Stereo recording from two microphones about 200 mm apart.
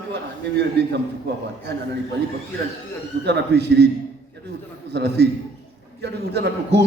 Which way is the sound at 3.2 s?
55° right (ahead or behind).